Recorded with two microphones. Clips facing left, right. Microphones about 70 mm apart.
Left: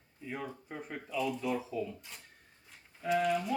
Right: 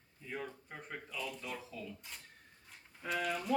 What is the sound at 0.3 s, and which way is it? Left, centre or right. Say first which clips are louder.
Speech: left 3 dB; centre.